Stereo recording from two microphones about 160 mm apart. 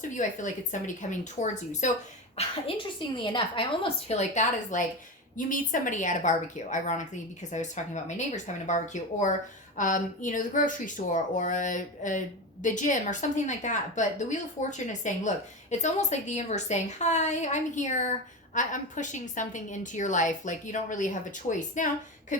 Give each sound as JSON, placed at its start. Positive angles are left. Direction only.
{"t": 0.0, "sound": "a woman's voice", "side_deg": 50}
{"t": 2.4, "sound": "a woman's voice", "side_deg": 35}
{"t": 22.3, "sound": "a sound", "side_deg": 50}